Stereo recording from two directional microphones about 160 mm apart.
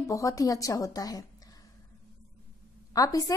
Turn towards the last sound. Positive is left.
turn(degrees=20)  # may be behind; listen again after turning